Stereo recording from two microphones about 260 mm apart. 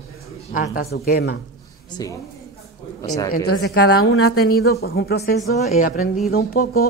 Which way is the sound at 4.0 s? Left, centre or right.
Left.